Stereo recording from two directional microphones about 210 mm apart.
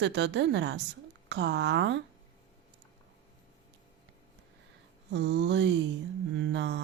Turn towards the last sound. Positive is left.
turn(degrees=-55)  # may be behind; listen again after turning